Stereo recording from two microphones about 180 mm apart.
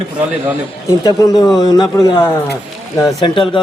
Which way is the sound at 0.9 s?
20° left (ahead or behind).